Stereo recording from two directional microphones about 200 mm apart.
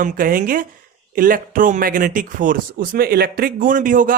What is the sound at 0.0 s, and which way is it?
Speech, 40° right (ahead or behind).